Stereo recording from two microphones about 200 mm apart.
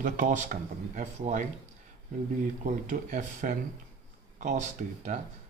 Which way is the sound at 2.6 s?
40° right (ahead or behind).